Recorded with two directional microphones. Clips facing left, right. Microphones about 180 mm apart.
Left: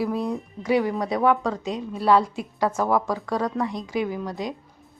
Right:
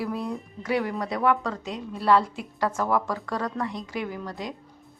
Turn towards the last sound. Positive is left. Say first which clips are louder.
# left 4 dB
turn(degrees=15)  # may be behind; listen again after turning